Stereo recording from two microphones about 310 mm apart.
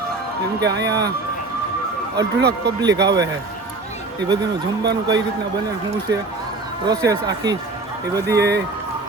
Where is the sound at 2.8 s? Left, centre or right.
Centre.